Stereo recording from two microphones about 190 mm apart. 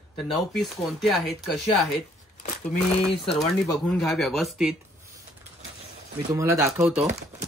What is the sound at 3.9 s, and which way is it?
Speech, centre (ahead or behind).